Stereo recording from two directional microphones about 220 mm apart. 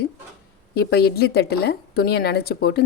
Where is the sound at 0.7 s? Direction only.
45° left (ahead or behind).